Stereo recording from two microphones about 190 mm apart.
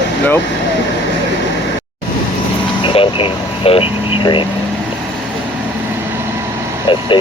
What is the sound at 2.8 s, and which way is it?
Speech, 30° left (ahead or behind).